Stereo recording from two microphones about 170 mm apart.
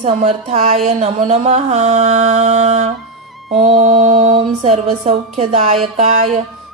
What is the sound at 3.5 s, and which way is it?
Mantra, 40° right (ahead or behind).